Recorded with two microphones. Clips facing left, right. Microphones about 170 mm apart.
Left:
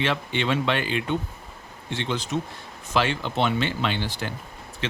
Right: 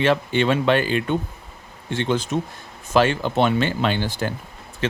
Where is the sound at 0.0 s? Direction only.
45° right (ahead or behind).